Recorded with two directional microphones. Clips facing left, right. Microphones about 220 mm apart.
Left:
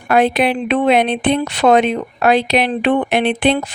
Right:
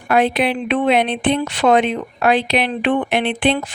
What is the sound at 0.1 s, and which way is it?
A woman's voice, 45° left (ahead or behind).